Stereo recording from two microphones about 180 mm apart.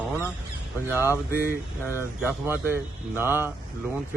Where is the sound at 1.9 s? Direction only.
10° right (ahead or behind).